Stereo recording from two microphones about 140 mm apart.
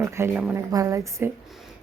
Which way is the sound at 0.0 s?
15° right (ahead or behind).